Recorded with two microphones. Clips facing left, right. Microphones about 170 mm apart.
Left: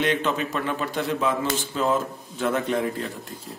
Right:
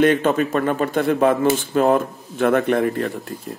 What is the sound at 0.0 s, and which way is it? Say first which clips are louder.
A man's voice: right 8 dB; 50° right (ahead or behind).